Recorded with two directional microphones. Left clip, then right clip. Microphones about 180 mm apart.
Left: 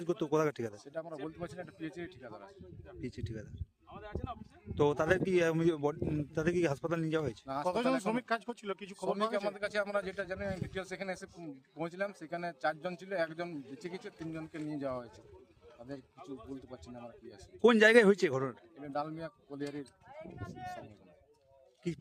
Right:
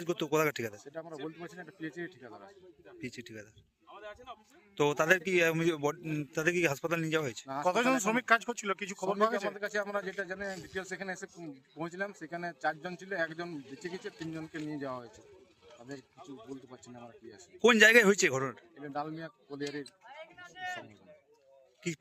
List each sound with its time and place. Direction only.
0.0 s speech: 15° left (ahead or behind)
4.7 s a man's voice: 15° left (ahead or behind)
7.7 s speech: 10° right (ahead or behind)
9.5 s speech: 20° left (ahead or behind)
16.5 s speech: 20° left (ahead or behind)
19.8 s speech: 55° left (ahead or behind)
21.8 s a man's voice: 20° left (ahead or behind)